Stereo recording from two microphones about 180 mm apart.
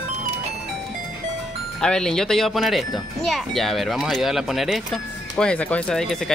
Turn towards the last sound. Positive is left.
turn(degrees=5)  # may be behind; listen again after turning